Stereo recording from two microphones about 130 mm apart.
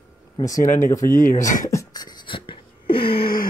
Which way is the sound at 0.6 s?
80° left.